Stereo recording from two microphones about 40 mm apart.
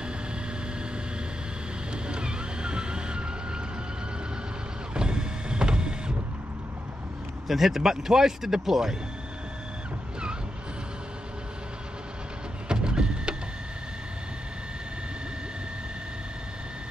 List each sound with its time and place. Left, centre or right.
2.0 s vehicle: right
4.9 s mechanisms: right
7.4 s speech: centre
12.6 s vehicle: right